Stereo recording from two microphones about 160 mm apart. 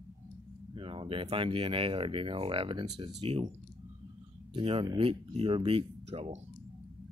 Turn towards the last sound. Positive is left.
turn(degrees=-40)  # may be behind; listen again after turning